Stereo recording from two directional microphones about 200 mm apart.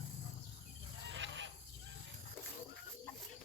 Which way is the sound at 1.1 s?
65° right (ahead or behind).